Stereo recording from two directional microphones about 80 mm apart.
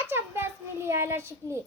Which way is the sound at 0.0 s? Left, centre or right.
Right.